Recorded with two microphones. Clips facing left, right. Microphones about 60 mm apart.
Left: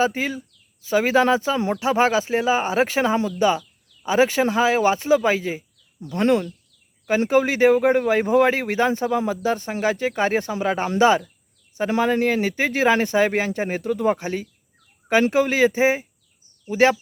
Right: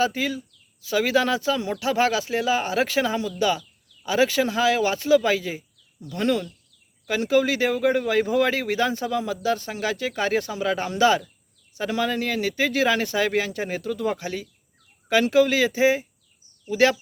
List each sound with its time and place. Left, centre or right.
0.0 s speech: left